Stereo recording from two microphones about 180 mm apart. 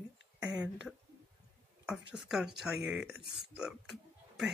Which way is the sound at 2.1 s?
Centre (ahead or behind).